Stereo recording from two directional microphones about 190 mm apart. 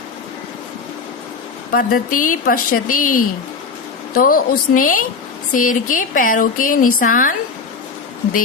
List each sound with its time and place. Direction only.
1.7 s speech: 45° left (ahead or behind)